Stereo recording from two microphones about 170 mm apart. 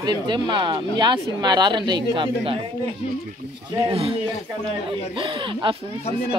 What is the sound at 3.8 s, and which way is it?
A man's voice, 35° right (ahead or behind).